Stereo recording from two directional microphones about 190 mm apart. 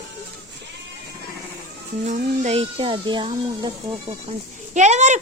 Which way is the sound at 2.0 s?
40° right (ahead or behind).